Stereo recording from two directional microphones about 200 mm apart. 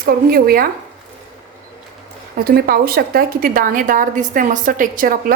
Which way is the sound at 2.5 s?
50° right (ahead or behind).